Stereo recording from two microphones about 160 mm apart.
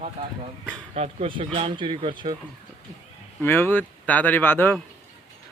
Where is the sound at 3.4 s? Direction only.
15° left (ahead or behind).